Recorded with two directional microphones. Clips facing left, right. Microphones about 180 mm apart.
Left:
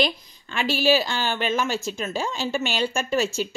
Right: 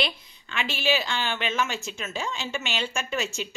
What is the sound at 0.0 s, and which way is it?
Speech, 40° left (ahead or behind).